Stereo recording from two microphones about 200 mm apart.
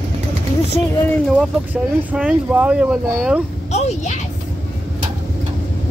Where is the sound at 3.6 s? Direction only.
35° left (ahead or behind).